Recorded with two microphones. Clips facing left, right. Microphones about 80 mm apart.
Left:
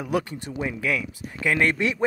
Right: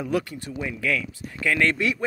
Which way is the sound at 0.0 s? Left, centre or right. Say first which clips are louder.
Even; left.